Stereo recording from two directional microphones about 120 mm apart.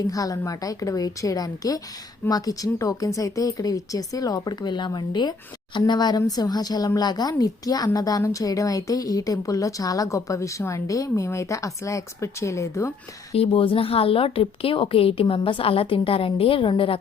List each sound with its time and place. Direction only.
0.1 s speech: 30° left (ahead or behind)
13.3 s a woman's voice: 50° left (ahead or behind)